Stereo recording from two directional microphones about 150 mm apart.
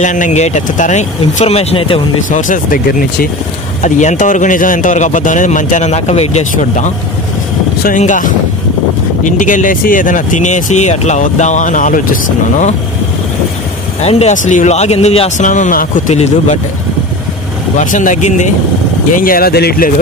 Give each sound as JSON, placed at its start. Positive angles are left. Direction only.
{"t": 0.0, "sound": "speech", "side_deg": 55}
{"t": 2.3, "sound": "speech", "side_deg": 60}
{"t": 3.8, "sound": "speech", "side_deg": 50}
{"t": 8.0, "sound": "speech", "side_deg": 60}
{"t": 14.0, "sound": "speech", "side_deg": 45}
{"t": 17.7, "sound": "speech", "side_deg": 55}
{"t": 19.1, "sound": "speech", "side_deg": 70}